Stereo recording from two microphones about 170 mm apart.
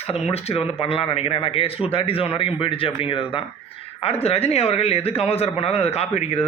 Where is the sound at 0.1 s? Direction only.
35° left (ahead or behind).